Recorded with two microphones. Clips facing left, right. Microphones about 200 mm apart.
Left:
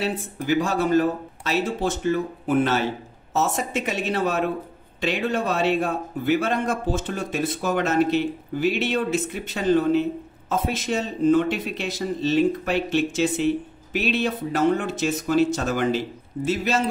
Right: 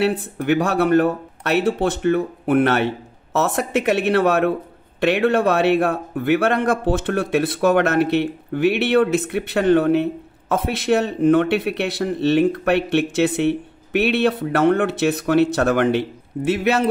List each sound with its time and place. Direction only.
0.0 s speech: 65° right (ahead or behind)